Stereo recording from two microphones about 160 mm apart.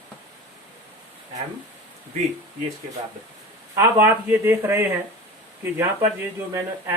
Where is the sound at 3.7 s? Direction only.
15° right (ahead or behind).